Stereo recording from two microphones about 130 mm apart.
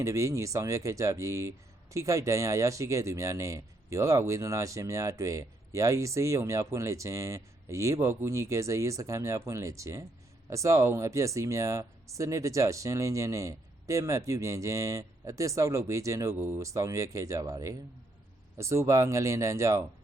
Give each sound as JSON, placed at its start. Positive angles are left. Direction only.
{"t": 0.0, "sound": "speech", "side_deg": -25}